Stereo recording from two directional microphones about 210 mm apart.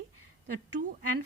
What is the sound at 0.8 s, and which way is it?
Speech, 35° right (ahead or behind).